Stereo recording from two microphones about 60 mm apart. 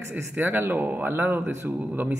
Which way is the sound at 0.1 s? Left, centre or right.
Right.